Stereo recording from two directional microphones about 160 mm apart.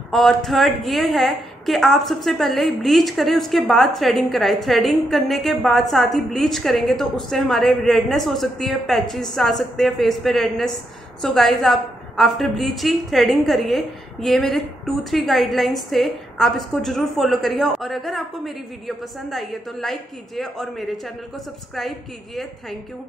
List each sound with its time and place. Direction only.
0.1 s a woman's voice: centre (ahead or behind)